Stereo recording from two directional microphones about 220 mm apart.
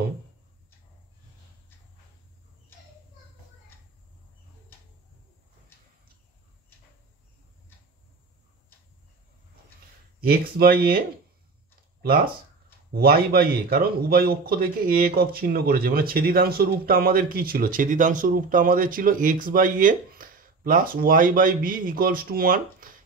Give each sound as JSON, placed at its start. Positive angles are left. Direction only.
{"t": 10.2, "sound": "speech", "side_deg": -45}
{"t": 12.9, "sound": "a man's voice", "side_deg": -45}